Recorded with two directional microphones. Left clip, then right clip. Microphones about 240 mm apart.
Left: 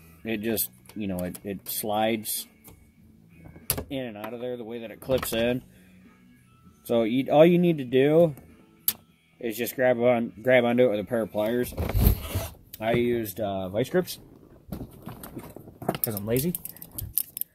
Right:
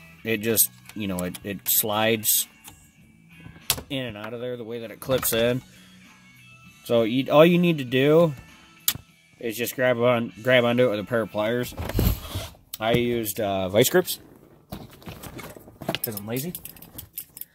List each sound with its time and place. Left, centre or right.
0.2 s speech: right
3.9 s speech: right
5.1 s speech: right
6.8 s speech: right
9.4 s speech: right
12.7 s speech: right
13.4 s speech: right
16.1 s speech: left